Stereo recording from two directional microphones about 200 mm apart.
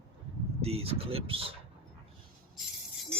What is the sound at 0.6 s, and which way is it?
Speech, 30° right (ahead or behind).